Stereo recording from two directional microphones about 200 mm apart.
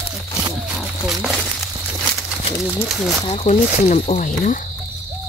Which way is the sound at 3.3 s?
35° left (ahead or behind).